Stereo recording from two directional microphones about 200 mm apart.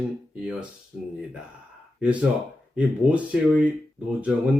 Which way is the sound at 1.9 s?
5° right (ahead or behind).